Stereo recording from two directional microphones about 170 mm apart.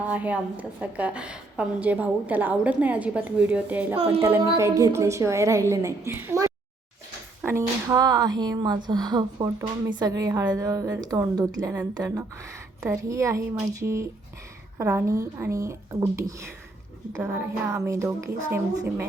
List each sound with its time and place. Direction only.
0.0 s a woman's voice: 10° right (ahead or behind)
3.9 s a child's voice: 35° right (ahead or behind)
4.2 s a woman's voice: 15° right (ahead or behind)